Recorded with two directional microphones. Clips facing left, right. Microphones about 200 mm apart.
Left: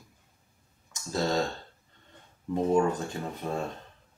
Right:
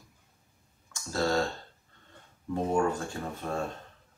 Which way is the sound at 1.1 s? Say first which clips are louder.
Even; 20° left (ahead or behind).